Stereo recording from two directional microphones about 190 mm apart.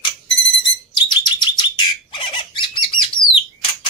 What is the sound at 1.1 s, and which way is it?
Bird, 25° left (ahead or behind).